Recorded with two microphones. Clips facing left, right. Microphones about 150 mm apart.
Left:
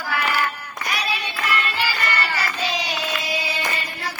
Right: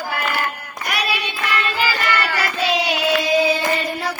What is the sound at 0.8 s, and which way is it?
Child singing, 65° right (ahead or behind).